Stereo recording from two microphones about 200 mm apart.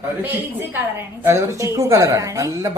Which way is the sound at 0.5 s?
10° right (ahead or behind).